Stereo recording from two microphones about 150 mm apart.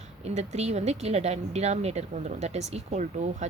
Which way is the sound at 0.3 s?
45° right (ahead or behind).